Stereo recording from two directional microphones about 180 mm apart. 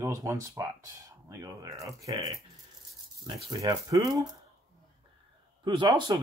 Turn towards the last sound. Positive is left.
turn(degrees=-25)  # may be behind; listen again after turning